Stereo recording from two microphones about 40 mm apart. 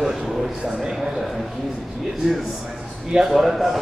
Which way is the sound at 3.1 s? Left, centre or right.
Centre.